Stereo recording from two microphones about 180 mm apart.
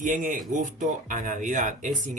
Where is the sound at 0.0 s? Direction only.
45° right (ahead or behind).